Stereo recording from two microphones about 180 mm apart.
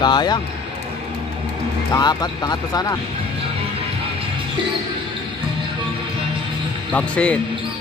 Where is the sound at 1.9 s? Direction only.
20° left (ahead or behind).